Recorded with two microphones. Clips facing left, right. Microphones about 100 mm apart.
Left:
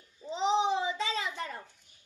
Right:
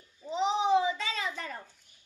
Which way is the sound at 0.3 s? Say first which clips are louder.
Right 2 dB; 25° left (ahead or behind).